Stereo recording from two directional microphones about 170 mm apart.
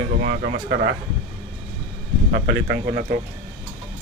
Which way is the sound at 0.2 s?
70° right (ahead or behind).